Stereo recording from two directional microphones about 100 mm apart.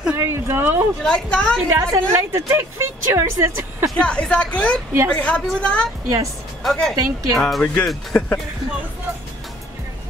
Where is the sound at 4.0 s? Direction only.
10° left (ahead or behind).